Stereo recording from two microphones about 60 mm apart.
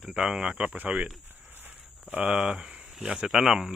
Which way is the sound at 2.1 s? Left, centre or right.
Centre.